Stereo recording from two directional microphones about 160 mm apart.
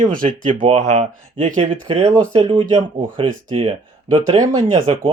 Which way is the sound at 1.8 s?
40° right (ahead or behind).